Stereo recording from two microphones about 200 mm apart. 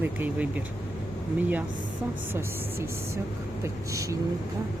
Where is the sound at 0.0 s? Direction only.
10° right (ahead or behind).